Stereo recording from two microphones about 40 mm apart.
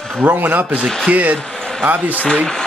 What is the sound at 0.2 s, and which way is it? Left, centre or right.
Speech, right.